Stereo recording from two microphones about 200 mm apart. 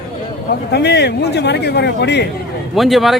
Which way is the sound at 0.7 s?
55° left (ahead or behind).